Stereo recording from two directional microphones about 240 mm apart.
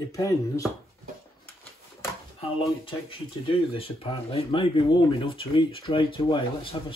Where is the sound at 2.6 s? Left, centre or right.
Left.